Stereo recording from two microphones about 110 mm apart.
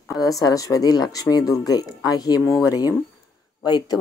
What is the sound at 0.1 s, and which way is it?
Speech, 35° left (ahead or behind).